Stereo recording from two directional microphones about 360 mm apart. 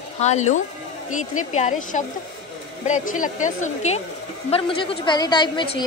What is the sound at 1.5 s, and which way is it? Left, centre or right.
A woman's voice, left.